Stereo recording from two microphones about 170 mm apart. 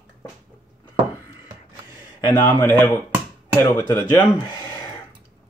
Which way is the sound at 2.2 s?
20° left (ahead or behind).